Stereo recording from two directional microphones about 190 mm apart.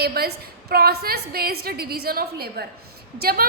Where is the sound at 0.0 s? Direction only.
55° right (ahead or behind).